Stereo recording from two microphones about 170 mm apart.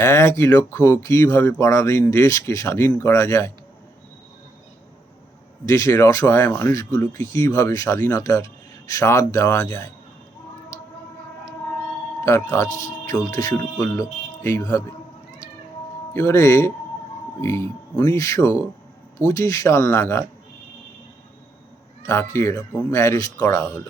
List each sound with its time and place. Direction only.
0.0 s speech: 15° left (ahead or behind)
5.6 s speech: 15° left (ahead or behind)
12.2 s speech: 15° left (ahead or behind)
16.1 s speech: 15° left (ahead or behind)
22.0 s speech: 15° left (ahead or behind)